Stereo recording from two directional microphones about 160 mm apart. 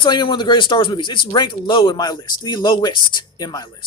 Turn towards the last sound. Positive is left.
turn(degrees=25)  # may be behind; listen again after turning